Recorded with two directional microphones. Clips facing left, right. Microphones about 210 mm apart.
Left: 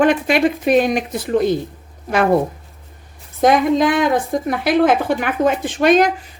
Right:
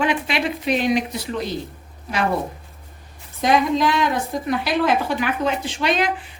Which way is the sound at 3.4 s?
50° left (ahead or behind).